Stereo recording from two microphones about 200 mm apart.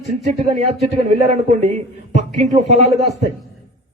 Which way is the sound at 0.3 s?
35° right (ahead or behind).